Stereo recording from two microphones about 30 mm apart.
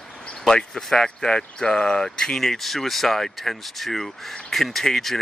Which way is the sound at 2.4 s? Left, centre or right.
Centre.